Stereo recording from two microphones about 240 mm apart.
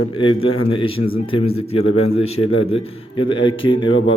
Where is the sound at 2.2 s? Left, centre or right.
Left.